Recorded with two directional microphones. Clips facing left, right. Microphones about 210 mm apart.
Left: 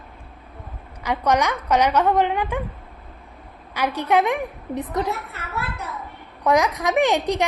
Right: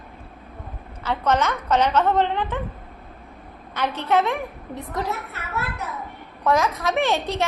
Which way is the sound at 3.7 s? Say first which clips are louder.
Left 1 dB; 10° left (ahead or behind).